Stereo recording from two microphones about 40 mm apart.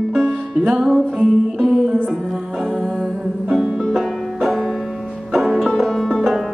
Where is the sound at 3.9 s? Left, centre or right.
Centre.